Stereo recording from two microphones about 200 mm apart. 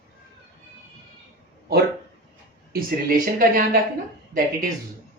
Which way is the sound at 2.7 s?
45° right (ahead or behind).